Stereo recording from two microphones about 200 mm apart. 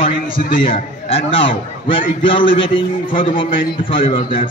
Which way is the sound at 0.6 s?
25° left (ahead or behind).